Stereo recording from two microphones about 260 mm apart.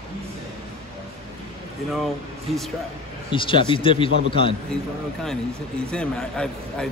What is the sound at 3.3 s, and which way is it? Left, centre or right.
Speech, centre.